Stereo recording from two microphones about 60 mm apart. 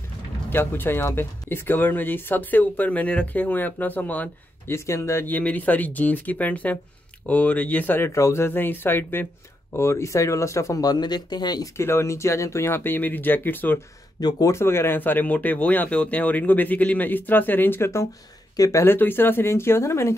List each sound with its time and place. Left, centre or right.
0.5 s speech: left
4.6 s speech: left
5.2 s speech: left
8.1 s speech: left
9.8 s speech: left
11.7 s speech: left
14.5 s speech: left
18.6 s speech: left
18.9 s speech: left